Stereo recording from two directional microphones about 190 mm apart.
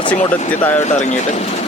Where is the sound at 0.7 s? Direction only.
40° left (ahead or behind).